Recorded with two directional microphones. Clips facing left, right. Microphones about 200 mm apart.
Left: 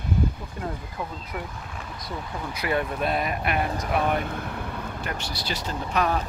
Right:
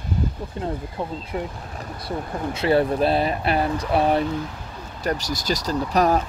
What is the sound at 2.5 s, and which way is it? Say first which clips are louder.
Speech: right 8 dB; 30° right (ahead or behind).